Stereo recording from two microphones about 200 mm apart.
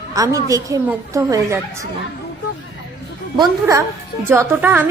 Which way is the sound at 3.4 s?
15° right (ahead or behind).